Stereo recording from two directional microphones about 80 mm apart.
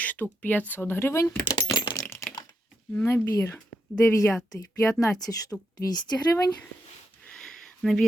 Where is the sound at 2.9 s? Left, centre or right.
Left.